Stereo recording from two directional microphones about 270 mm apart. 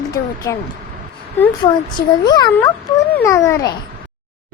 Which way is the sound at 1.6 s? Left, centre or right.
Centre.